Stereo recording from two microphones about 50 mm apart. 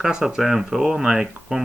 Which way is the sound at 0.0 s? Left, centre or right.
Centre.